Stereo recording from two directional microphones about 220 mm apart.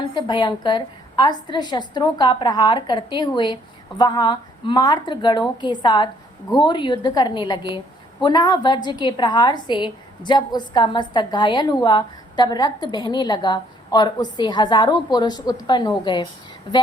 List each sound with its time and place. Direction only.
0.1 s a woman's voice: 20° left (ahead or behind)